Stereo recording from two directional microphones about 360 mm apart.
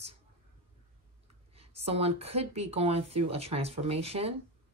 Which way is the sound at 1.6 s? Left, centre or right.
Centre.